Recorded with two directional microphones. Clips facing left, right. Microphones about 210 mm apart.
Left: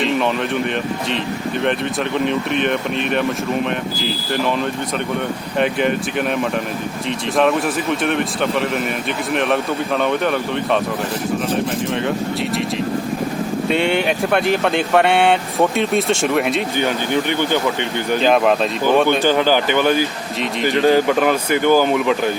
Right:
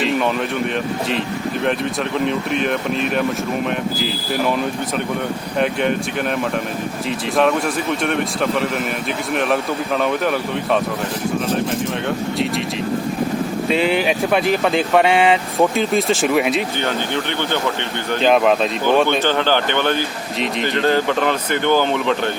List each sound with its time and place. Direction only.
2.1 s speech: centre (ahead or behind)
5.5 s speech: centre (ahead or behind)
13.7 s speech: centre (ahead or behind)
16.7 s speech: 10° left (ahead or behind)